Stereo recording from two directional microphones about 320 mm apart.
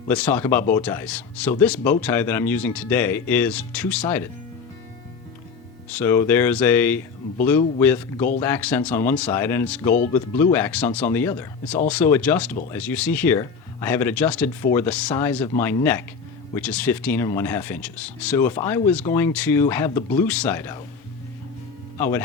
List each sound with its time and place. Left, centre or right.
0.1 s speech: centre
5.9 s speech: centre
9.8 s speech: left
10.1 s speech: centre
21.9 s speech: centre